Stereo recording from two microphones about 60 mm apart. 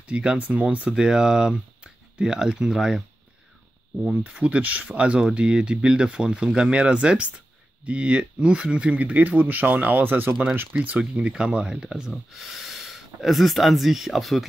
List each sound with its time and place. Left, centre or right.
0.0 s speech: centre
0.9 s speech: centre
4.1 s speech: right
11.1 s speech: centre